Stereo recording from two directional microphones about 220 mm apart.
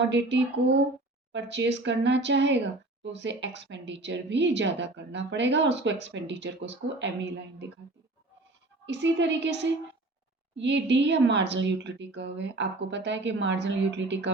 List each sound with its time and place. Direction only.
0.0 s a woman's voice: 55° right (ahead or behind)
8.9 s a woman's voice: 50° right (ahead or behind)